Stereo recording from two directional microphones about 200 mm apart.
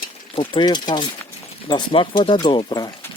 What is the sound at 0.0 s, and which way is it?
Speech, 25° left (ahead or behind).